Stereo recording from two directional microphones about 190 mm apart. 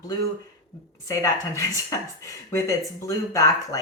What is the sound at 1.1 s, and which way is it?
Speech, 15° left (ahead or behind).